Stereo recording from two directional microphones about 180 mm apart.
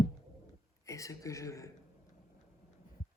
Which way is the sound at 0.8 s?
15° left (ahead or behind).